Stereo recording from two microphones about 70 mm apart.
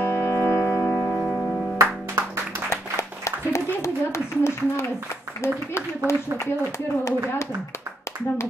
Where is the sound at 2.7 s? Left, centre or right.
Left.